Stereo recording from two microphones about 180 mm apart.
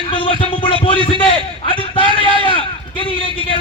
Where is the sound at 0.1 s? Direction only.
30° left (ahead or behind).